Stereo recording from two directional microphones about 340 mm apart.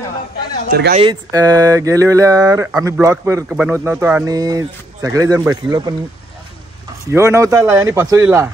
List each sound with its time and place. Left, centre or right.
0.7 s speech: right
1.0 s speech: centre
7.1 s speech: centre